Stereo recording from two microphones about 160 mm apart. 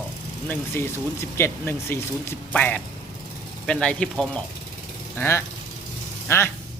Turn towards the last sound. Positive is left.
turn(degrees=15)  # may be behind; listen again after turning